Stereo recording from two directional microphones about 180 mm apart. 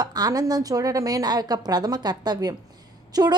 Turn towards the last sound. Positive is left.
turn(degrees=-20)  # may be behind; listen again after turning